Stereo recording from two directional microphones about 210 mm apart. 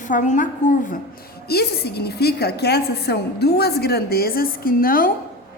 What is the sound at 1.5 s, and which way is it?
A woman's voice, 50° left (ahead or behind).